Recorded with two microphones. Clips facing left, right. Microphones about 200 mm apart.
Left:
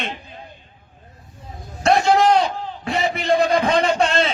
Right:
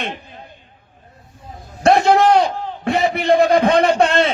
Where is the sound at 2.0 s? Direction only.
55° right (ahead or behind).